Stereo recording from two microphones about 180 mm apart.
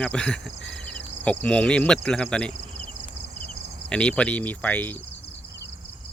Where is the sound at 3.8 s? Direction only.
5° left (ahead or behind).